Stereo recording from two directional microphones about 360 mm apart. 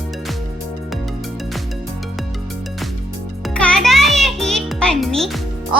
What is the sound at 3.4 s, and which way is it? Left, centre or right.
Music, centre.